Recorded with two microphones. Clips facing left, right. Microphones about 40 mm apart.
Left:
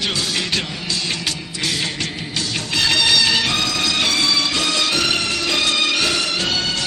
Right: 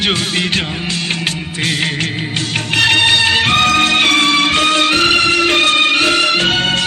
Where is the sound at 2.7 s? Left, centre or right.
Right.